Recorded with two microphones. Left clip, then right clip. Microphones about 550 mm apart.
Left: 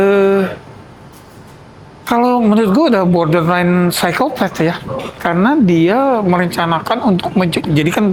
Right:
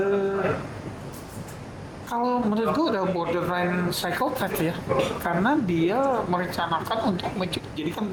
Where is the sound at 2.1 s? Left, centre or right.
Left.